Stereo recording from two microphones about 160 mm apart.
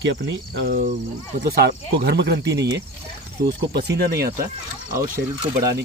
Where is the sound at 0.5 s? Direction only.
75° right (ahead or behind).